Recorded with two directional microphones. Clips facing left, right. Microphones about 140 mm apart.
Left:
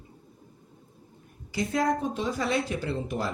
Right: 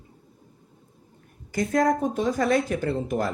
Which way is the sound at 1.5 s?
50° right (ahead or behind).